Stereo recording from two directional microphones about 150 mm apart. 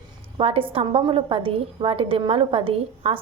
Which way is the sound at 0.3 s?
40° right (ahead or behind).